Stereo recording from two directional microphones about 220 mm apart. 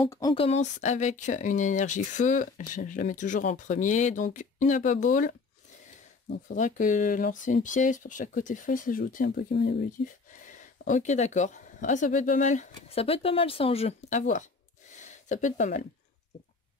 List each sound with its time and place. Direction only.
0.0 s speech: 15° left (ahead or behind); by 5.3 s 35° left (ahead or behind)
6.3 s speech: 35° left (ahead or behind)